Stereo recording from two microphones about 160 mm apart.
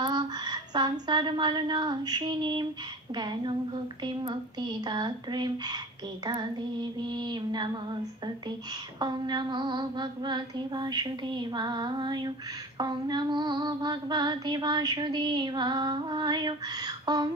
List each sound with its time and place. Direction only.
0.0 s female singing: 25° right (ahead or behind)
9.0 s female singing: 25° right (ahead or behind)